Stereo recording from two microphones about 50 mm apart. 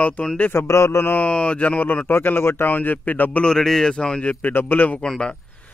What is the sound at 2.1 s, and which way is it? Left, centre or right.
Speech, left.